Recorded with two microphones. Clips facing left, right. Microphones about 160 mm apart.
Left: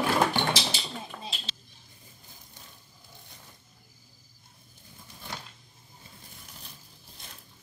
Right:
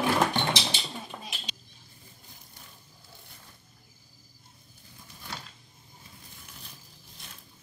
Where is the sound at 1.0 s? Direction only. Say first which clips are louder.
Left 1 dB; 15° right (ahead or behind).